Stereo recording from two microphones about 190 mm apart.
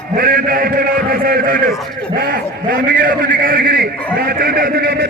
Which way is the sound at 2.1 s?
50° right (ahead or behind).